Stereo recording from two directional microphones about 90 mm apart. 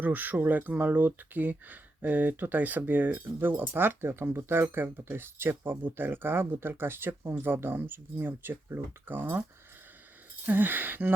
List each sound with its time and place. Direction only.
0.0 s speech: 20° right (ahead or behind)
10.4 s speech: 20° right (ahead or behind)